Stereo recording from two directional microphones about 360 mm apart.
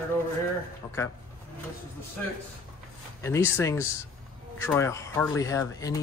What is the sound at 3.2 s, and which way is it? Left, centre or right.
Speech, centre.